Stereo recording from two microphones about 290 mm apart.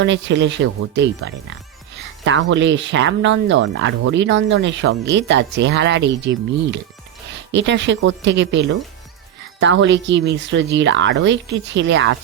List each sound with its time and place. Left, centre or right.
0.0 s speech: right